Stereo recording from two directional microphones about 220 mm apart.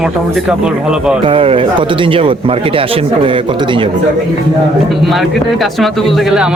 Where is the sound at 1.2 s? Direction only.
25° right (ahead or behind).